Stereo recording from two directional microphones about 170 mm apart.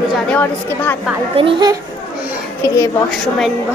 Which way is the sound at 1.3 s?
30° right (ahead or behind).